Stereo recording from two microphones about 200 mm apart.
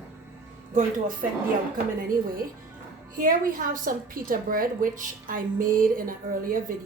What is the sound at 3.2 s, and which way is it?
A woman's voice, 45° right (ahead or behind).